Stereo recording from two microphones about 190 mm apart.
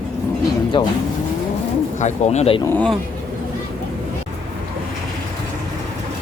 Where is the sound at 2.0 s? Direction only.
35° left (ahead or behind).